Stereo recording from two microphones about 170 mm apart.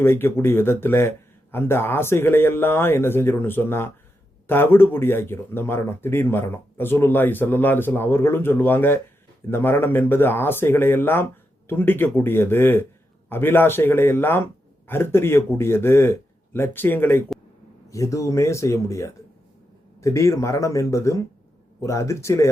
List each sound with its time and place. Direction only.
0.0 s speech: 15° left (ahead or behind)